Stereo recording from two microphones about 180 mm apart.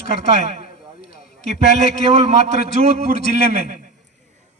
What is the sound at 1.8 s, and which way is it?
A man's voice, 35° right (ahead or behind).